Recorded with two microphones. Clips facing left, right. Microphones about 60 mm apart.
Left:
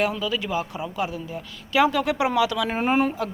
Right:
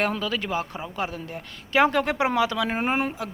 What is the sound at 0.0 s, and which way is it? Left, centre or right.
Speech, right.